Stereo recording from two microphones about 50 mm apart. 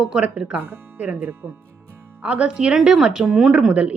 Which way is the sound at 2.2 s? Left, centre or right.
Right.